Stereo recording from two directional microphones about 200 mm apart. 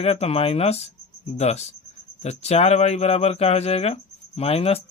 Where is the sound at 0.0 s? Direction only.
30° left (ahead or behind).